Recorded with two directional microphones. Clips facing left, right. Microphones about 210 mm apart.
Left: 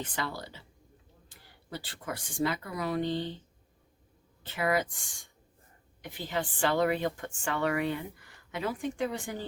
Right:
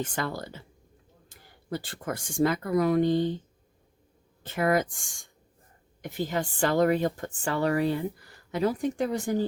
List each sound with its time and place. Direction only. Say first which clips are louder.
0.0 s a woman's voice: right 5 dB; 45° right (ahead or behind)
4.4 s a woman's voice: right 4 dB; 45° right (ahead or behind)